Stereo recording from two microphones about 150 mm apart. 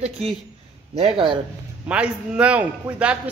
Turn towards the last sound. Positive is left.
turn(degrees=-10)  # may be behind; listen again after turning